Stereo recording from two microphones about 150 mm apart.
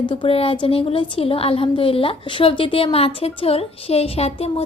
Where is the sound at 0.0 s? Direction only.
35° left (ahead or behind).